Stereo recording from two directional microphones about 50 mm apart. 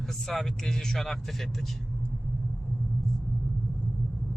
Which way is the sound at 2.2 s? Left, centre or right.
Centre.